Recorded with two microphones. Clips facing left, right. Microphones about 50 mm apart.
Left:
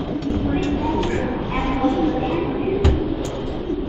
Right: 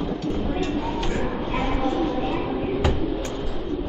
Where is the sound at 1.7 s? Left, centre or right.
Centre.